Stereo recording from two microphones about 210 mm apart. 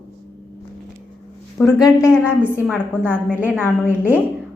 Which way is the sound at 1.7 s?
15° left (ahead or behind).